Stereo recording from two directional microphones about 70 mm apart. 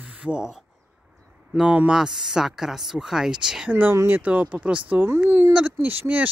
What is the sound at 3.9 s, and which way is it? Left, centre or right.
Speech, right.